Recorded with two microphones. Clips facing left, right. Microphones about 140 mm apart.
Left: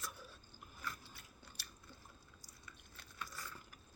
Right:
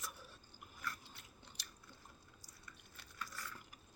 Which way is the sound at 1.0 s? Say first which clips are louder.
Left 1 dB; 20° right (ahead or behind).